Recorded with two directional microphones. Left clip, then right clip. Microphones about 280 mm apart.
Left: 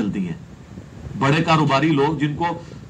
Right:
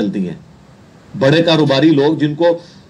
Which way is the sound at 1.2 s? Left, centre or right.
Centre.